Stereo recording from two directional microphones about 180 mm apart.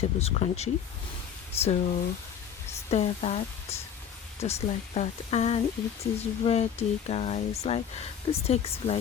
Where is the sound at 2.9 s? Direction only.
35° left (ahead or behind).